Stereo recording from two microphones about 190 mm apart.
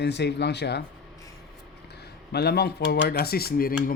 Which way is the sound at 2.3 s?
60° left (ahead or behind).